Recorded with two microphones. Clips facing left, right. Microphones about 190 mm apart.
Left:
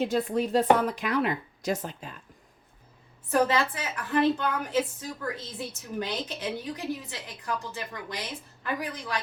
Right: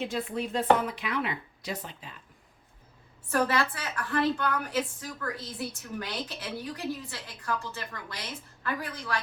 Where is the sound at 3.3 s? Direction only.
20° left (ahead or behind).